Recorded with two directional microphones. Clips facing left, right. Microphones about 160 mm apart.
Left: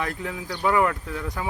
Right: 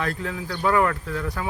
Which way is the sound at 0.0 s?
15° left (ahead or behind).